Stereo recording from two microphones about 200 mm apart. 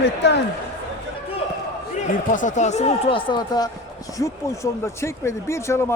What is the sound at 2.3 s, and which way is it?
Speech, 40° left (ahead or behind).